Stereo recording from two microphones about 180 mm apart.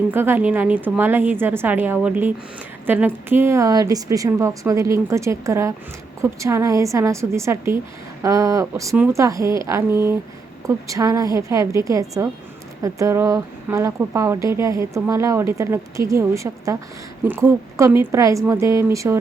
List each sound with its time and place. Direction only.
0.1 s speech: 10° right (ahead or behind)